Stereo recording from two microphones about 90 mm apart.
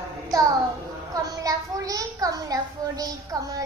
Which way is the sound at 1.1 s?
40° right (ahead or behind).